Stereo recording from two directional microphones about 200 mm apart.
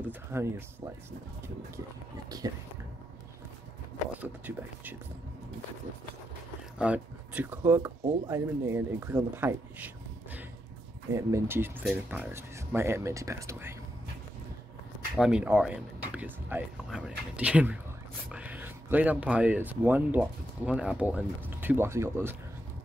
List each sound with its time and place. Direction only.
0.0 s a sound: 10° right (ahead or behind)
2.4 s speech: 20° right (ahead or behind)
4.2 s speech: 10° right (ahead or behind)
6.8 s speech: 5° right (ahead or behind)
15.1 s speech: 5° right (ahead or behind)